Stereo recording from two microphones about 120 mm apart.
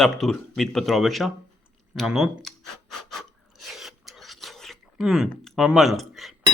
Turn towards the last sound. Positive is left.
turn(degrees=0)  # may be behind; listen again after turning